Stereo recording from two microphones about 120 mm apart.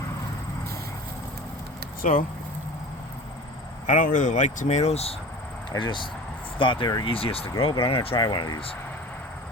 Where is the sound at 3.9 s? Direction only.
90° left; by 5.2 s 60° left (ahead or behind).